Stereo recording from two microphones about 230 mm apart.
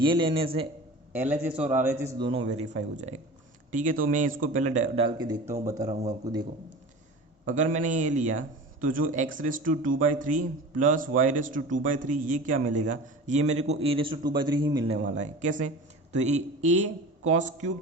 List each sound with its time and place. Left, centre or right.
0.0 s a man's voice: right
1.1 s a man's voice: centre
7.4 s a man's voice: right; by 14.9 s centre
14.9 s a man's voice: right